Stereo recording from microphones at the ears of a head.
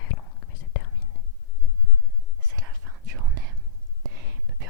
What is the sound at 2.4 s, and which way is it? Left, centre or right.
Whispering, right.